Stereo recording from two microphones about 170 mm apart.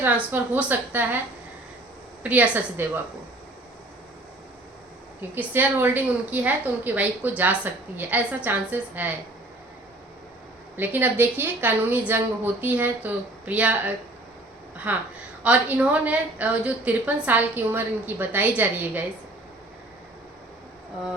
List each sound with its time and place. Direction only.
0.0 s a woman's voice: 10° right (ahead or behind)
2.2 s a woman's voice: 10° right (ahead or behind)
5.3 s a woman's voice: 10° right (ahead or behind)
10.8 s a woman's voice: 10° right (ahead or behind)